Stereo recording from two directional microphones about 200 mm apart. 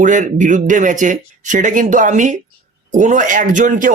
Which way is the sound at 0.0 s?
40° right (ahead or behind).